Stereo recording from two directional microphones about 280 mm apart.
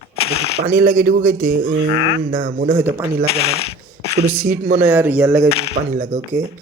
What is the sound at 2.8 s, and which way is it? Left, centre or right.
Speech, centre.